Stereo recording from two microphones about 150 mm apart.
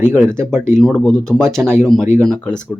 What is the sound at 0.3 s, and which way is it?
Speech, 5° left (ahead or behind).